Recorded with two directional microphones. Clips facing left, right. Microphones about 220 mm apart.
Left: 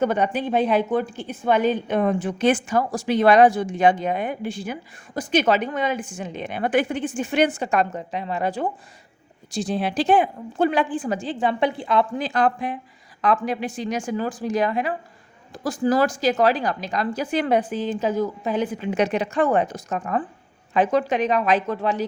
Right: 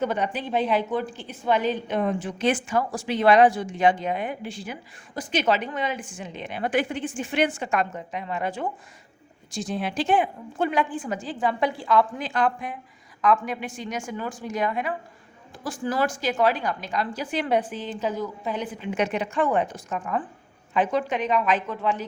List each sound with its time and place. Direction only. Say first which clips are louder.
0.0 s a woman's voice: left 5 dB; 50° left (ahead or behind)
17.7 s a woman's voice: left 6 dB; 90° left
18.9 s a woman's voice: left 3 dB; 35° left (ahead or behind)